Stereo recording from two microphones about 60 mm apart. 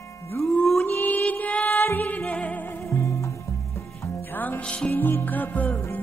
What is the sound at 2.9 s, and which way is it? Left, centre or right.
Music, left.